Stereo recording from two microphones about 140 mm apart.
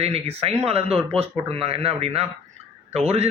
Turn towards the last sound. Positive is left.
turn(degrees=-50)  # may be behind; listen again after turning